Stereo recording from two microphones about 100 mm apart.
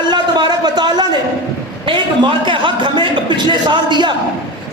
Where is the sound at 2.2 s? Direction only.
55° right (ahead or behind).